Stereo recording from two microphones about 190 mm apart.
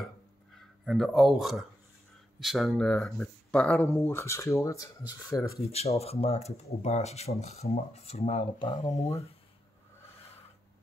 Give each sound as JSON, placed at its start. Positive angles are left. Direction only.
{"t": 0.8, "sound": "speech", "side_deg": 0}
{"t": 5.0, "sound": "speech", "side_deg": -10}
{"t": 5.7, "sound": "speech", "side_deg": 35}